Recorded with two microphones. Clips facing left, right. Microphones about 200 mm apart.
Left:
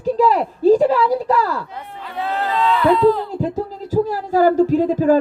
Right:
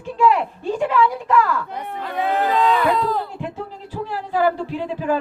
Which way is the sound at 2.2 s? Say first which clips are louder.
Right 1 dB; 15° right (ahead or behind).